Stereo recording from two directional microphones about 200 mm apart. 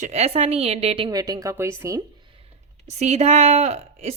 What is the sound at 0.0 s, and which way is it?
A woman's voice, 30° right (ahead or behind).